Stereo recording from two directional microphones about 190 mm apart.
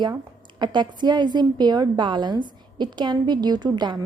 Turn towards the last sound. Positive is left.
turn(degrees=-25)  # may be behind; listen again after turning